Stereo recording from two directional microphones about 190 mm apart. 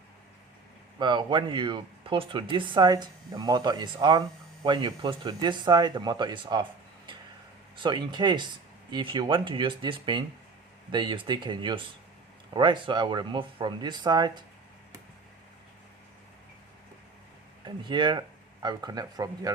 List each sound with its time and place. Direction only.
0.9 s speech: 25° right (ahead or behind)
7.8 s speech: 25° right (ahead or behind)
17.8 s speech: 25° right (ahead or behind)